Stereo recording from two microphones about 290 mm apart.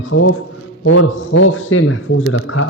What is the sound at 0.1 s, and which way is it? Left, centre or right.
Speech, left.